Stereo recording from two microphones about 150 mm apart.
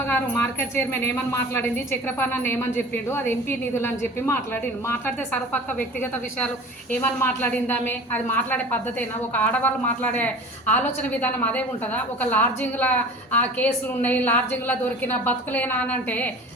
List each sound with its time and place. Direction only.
0.8 s a woman's voice: 15° left (ahead or behind)